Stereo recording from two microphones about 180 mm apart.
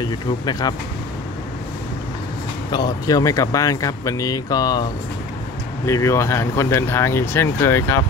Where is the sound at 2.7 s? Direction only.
20° left (ahead or behind).